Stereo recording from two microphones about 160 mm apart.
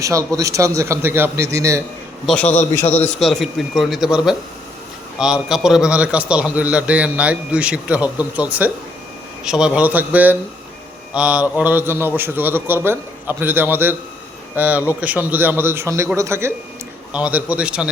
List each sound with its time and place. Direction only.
0.0 s a man's voice: 20° right (ahead or behind)
2.2 s a man's voice: 5° left (ahead or behind)